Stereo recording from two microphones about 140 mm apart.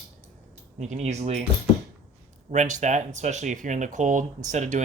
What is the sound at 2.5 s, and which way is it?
Speech, 60° right (ahead or behind).